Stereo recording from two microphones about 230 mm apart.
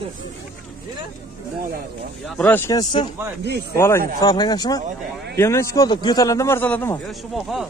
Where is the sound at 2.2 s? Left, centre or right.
Centre.